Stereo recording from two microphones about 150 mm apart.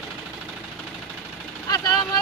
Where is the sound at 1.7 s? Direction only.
25° left (ahead or behind).